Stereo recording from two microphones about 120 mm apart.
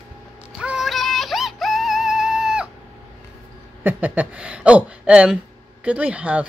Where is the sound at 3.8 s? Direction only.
15° right (ahead or behind).